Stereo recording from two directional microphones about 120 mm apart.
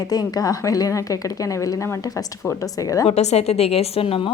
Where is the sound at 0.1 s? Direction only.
30° left (ahead or behind).